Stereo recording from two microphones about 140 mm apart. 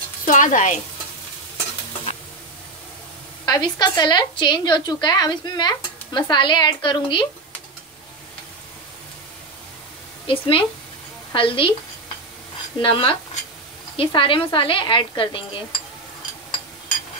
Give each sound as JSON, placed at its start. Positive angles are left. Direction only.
{"t": 0.2, "sound": "speech", "side_deg": 65}
{"t": 3.4, "sound": "speech", "side_deg": 30}
{"t": 10.2, "sound": "speech", "side_deg": 40}
{"t": 12.8, "sound": "speech", "side_deg": 40}